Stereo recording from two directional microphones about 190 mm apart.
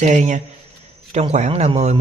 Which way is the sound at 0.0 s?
40° right (ahead or behind).